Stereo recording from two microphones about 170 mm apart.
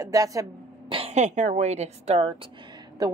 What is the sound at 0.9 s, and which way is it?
A woman's voice, 40° right (ahead or behind).